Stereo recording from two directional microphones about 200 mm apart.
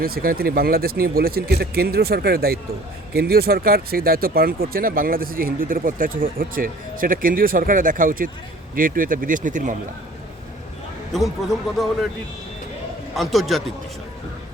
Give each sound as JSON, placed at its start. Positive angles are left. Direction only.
{"t": 0.0, "sound": "speech", "side_deg": -45}
{"t": 11.1, "sound": "a man's voice", "side_deg": 0}
{"t": 13.1, "sound": "a man's voice", "side_deg": 0}